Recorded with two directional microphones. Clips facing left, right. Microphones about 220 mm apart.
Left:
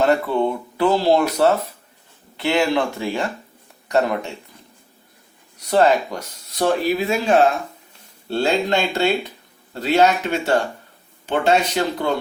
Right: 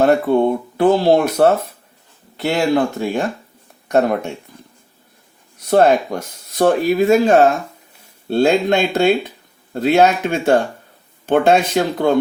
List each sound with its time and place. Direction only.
0.0 s speech: 50° right (ahead or behind)
5.7 s speech: 50° right (ahead or behind)